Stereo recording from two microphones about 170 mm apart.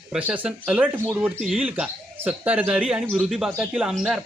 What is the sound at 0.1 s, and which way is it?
Speech, 10° right (ahead or behind).